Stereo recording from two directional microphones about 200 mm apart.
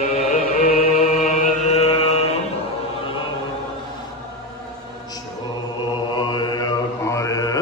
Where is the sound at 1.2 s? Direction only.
35° left (ahead or behind).